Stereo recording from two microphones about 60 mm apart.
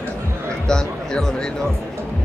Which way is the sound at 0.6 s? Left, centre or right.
Centre.